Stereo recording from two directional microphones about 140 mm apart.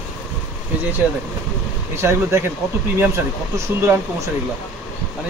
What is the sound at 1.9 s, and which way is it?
Speech, 20° right (ahead or behind).